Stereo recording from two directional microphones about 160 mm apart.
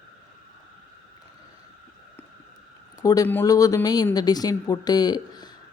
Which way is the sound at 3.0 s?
20° left (ahead or behind).